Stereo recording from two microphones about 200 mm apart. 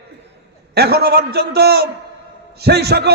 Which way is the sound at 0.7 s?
55° right (ahead or behind).